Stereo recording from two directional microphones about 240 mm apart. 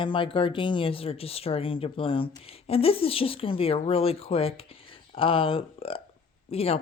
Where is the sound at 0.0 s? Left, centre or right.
Left.